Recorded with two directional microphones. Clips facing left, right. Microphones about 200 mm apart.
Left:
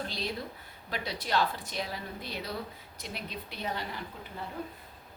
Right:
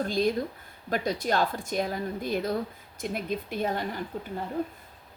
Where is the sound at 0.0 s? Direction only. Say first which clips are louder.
Right 10 dB; 50° right (ahead or behind).